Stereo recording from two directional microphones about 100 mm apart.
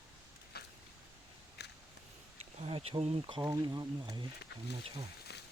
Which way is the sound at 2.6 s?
80° right.